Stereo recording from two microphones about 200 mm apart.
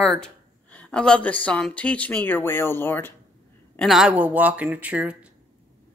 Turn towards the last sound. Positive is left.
turn(degrees=-5)  # may be behind; listen again after turning